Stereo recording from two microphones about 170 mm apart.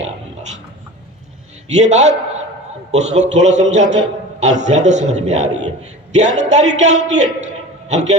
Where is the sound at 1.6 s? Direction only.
45° right (ahead or behind).